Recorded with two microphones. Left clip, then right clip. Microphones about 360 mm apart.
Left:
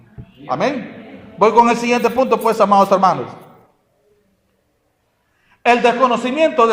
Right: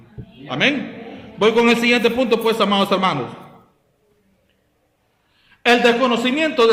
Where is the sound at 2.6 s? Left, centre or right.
Centre.